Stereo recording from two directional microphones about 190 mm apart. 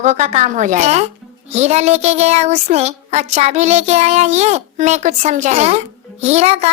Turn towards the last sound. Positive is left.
turn(degrees=-35)  # may be behind; listen again after turning